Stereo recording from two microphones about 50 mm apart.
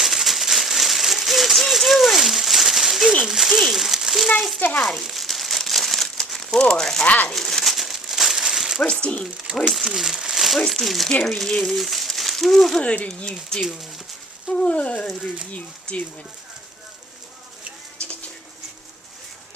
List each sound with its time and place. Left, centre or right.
0.0 s a sound: centre
3.2 s speech: centre
4.8 s crumpling: centre
7.0 s speech: left
7.3 s crumpling: centre
8.8 s speech: left
9.6 s speech: centre
11.3 s speech: centre
12.8 s speech: left
13.1 s speech: centre
14.5 s a sound: left
15.5 s speech: left